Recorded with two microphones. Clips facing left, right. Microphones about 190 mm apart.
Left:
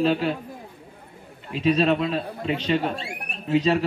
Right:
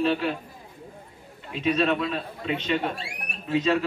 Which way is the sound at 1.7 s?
35° left (ahead or behind).